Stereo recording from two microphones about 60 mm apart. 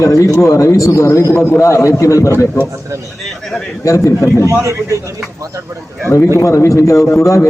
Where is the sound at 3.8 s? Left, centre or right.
Left.